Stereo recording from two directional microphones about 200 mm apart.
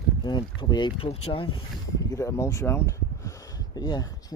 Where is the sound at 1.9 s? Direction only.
15° left (ahead or behind).